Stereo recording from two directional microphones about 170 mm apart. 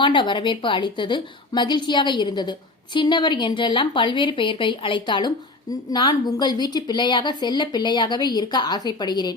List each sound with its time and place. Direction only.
0.0 s a woman's voice: 30° left (ahead or behind)